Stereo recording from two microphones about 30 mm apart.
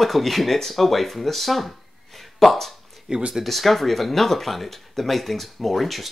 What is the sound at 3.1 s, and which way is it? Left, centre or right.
Speech, right.